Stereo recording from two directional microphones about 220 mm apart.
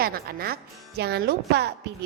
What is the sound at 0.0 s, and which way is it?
Speech, 45° right (ahead or behind).